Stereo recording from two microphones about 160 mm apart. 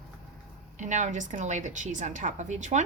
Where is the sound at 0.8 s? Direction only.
50° right (ahead or behind).